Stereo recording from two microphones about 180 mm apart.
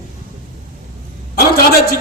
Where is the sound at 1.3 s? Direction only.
60° left (ahead or behind).